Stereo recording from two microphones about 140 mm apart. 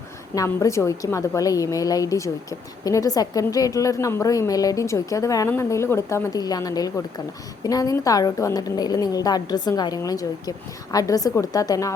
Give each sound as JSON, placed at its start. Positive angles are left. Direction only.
{"t": 0.3, "sound": "a woman's voice", "side_deg": 20}